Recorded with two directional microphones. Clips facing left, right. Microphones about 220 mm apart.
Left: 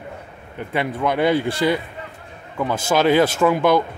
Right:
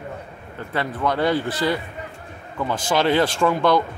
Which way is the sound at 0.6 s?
15° left (ahead or behind).